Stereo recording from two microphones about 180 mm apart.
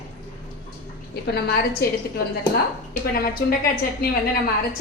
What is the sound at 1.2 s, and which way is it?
Speech, 60° left (ahead or behind).